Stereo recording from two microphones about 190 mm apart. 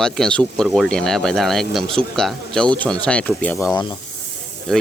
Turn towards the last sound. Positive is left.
turn(degrees=5)  # may be behind; listen again after turning